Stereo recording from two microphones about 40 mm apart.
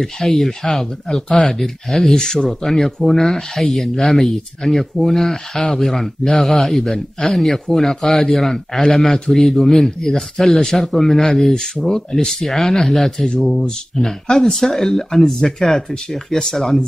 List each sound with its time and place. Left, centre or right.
0.0 s speech: centre
2.1 s a man's voice: centre
2.6 s a man's voice: centre